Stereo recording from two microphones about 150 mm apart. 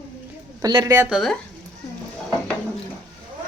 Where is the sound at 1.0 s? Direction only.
Centre (ahead or behind).